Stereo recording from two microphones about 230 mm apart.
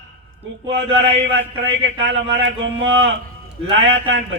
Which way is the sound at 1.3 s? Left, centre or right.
Right.